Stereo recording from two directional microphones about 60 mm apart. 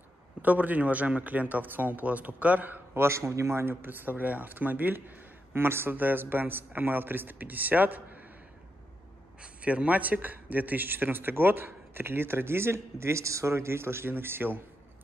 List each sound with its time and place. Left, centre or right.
0.4 s speech: right
9.4 s speech: centre; by 14.6 s right